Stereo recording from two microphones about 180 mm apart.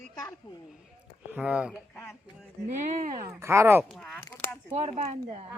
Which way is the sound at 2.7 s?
40° right (ahead or behind).